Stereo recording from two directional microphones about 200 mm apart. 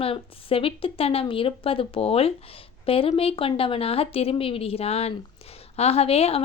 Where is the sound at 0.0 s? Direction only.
30° left (ahead or behind).